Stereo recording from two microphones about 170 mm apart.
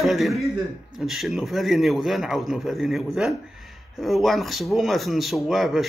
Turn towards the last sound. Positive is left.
turn(degrees=0)  # may be behind; listen again after turning